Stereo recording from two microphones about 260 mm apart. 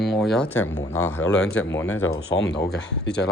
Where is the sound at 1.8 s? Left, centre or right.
Left.